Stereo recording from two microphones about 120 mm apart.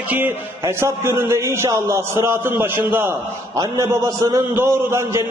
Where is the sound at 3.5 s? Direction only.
30° right (ahead or behind).